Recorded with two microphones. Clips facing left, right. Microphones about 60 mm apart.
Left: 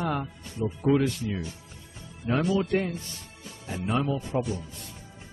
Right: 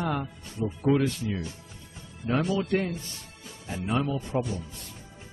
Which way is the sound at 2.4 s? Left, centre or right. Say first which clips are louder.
Left 1 dB; centre.